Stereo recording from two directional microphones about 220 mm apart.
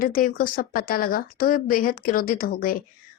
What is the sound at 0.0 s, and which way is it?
A woman's voice, 40° left (ahead or behind).